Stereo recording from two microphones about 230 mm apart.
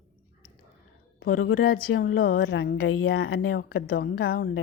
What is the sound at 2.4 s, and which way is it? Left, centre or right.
Speech, left.